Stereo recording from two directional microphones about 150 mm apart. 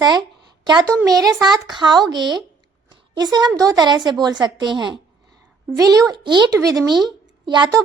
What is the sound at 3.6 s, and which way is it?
A woman's voice, 25° right (ahead or behind).